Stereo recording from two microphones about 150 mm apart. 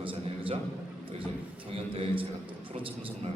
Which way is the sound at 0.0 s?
35° right (ahead or behind).